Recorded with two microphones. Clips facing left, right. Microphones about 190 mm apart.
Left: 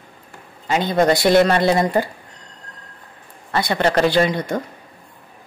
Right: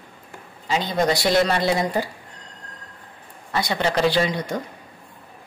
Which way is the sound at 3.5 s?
55° left (ahead or behind).